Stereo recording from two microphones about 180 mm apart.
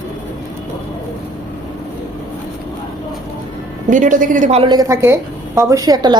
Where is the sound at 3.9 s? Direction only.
45° right (ahead or behind).